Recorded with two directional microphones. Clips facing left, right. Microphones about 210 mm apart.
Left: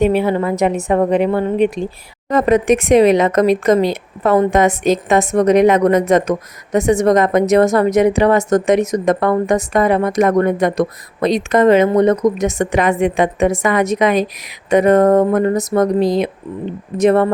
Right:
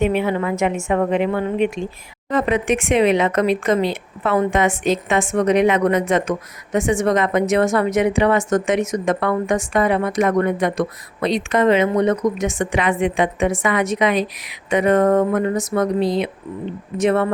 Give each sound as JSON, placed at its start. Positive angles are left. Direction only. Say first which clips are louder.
{"t": 0.0, "sound": "speech", "louder": "left 4 dB", "side_deg": 35}